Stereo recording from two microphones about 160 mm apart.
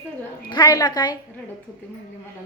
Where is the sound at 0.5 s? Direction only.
25° left (ahead or behind).